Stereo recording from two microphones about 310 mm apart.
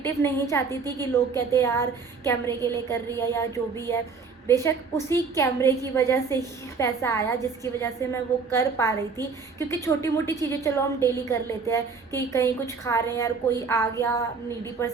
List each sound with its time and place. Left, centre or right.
0.0 s a woman's voice: centre